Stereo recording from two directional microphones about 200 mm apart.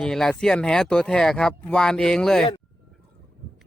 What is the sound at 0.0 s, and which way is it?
Speech, centre (ahead or behind).